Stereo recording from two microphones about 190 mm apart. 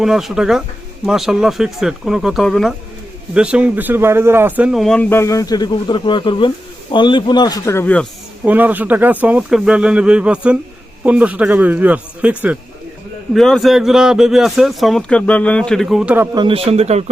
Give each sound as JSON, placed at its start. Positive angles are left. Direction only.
{"t": 0.0, "sound": "speech", "side_deg": 0}
{"t": 8.4, "sound": "speech", "side_deg": -10}
{"t": 16.3, "sound": "a man's voice", "side_deg": -25}